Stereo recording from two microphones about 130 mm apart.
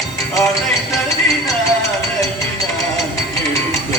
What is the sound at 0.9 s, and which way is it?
Music, 25° left (ahead or behind).